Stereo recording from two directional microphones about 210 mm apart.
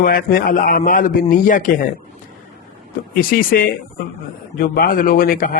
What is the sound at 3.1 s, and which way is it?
A man's voice, 45° left (ahead or behind).